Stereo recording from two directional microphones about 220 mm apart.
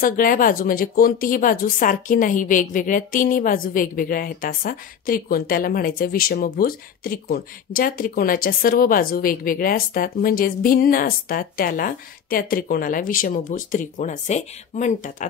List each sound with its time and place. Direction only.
0.0 s a woman's voice: 40° left (ahead or behind)